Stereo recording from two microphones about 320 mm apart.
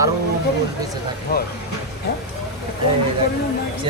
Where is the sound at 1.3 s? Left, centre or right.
Left.